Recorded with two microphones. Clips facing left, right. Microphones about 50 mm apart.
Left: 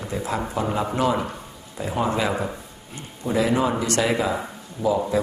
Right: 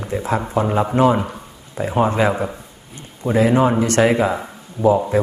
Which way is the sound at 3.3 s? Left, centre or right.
Right.